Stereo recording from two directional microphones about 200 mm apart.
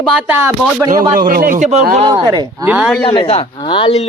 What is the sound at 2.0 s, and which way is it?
Speech, 20° right (ahead or behind).